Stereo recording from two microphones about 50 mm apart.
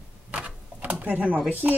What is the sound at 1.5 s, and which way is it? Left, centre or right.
Speech, right.